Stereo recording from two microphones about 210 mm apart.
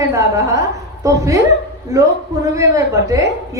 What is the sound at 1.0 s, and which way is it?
A woman's voice, 15° right (ahead or behind).